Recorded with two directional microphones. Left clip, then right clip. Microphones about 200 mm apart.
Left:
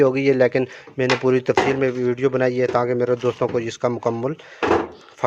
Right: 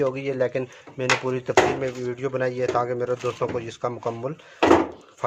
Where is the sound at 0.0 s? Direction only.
45° left (ahead or behind).